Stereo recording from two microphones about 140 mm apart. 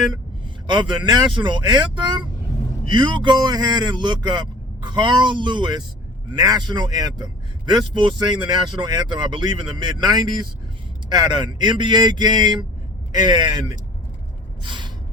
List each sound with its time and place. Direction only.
0.7 s a man's voice: 30° right (ahead or behind)
14.6 s gasp: 35° right (ahead or behind)